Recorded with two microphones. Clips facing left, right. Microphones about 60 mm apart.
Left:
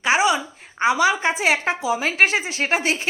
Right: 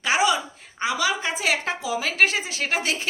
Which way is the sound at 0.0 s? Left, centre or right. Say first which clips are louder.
Left 3 dB; left.